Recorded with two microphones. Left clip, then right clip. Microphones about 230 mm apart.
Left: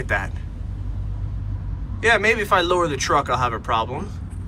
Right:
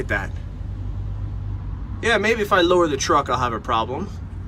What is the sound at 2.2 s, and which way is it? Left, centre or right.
Speech, centre.